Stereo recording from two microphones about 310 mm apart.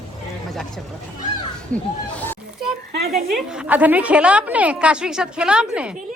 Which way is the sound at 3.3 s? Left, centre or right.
Centre.